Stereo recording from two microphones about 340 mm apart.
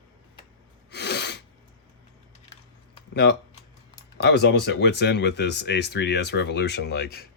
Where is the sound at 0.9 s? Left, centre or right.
Left.